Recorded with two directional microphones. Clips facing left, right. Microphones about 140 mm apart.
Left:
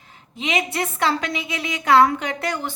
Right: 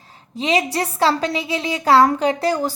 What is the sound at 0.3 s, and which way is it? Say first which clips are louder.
A woman's voice: right 4 dB; 35° right (ahead or behind).